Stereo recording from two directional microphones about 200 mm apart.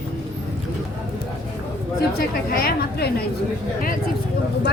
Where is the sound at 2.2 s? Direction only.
45° left (ahead or behind).